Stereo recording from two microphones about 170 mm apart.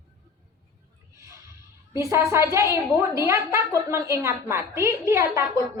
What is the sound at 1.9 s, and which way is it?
A woman's voice, 15° right (ahead or behind).